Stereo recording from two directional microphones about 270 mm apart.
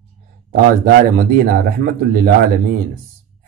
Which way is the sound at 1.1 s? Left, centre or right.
Right.